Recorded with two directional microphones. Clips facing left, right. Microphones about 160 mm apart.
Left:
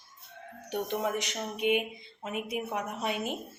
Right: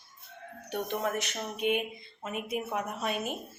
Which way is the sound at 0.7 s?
15° left (ahead or behind).